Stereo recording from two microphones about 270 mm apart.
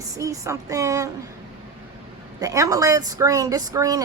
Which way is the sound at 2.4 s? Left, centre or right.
Centre.